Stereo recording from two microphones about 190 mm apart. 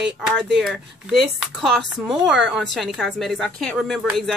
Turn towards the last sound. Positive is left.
turn(degrees=0)  # may be behind; listen again after turning